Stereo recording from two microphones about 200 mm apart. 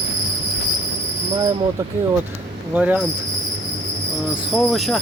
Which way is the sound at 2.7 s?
10° right (ahead or behind).